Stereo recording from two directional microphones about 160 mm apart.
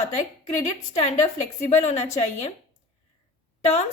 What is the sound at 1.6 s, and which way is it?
Speech, 45° left (ahead or behind).